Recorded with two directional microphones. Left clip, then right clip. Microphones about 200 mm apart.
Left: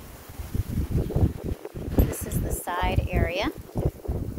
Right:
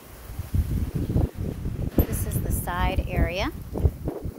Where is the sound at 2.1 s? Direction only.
Centre (ahead or behind).